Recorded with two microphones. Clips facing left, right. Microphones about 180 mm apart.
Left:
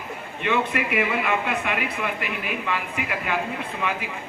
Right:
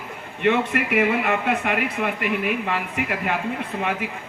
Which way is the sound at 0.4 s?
55° right (ahead or behind).